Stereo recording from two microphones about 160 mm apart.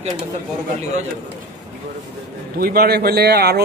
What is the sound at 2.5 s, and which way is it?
Speech, 70° right (ahead or behind).